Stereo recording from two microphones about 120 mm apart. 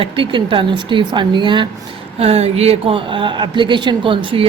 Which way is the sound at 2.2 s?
60° right (ahead or behind).